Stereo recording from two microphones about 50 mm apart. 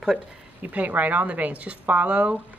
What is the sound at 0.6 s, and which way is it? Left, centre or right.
A woman's voice, right.